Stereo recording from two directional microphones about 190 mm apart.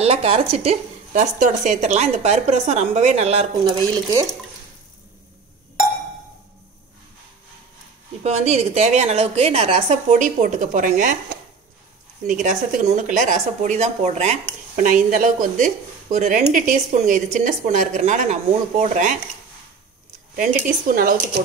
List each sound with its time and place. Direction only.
0.0 s speech: 30° right (ahead or behind)
3.6 s speech: 15° right (ahead or behind)
8.2 s speech: 35° right (ahead or behind)
12.3 s speech: 45° right (ahead or behind)
20.3 s speech: 45° right (ahead or behind)